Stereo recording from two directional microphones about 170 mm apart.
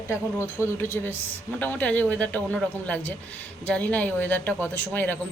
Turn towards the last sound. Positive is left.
turn(degrees=10)  # may be behind; listen again after turning